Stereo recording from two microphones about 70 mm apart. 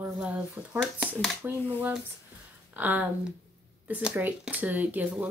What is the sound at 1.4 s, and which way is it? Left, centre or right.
Speech, right.